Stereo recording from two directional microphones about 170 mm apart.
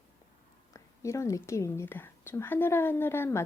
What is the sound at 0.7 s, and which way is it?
Speech, 15° left (ahead or behind).